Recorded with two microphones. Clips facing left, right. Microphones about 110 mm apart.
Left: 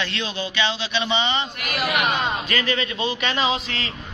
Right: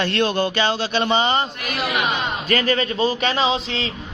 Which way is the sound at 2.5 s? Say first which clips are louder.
Right 5 dB; 40° right (ahead or behind).